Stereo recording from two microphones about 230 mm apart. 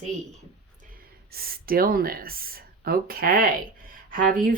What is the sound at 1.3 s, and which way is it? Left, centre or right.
Speech, right.